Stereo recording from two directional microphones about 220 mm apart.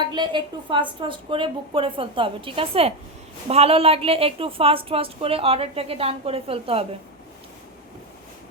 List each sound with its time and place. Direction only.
0.0 s a woman's voice: 20° right (ahead or behind)